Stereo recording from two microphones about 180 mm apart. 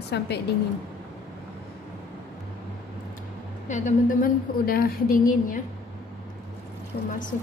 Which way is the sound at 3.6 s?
45° left (ahead or behind).